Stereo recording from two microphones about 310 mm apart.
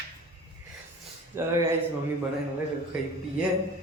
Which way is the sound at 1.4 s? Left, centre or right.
Centre.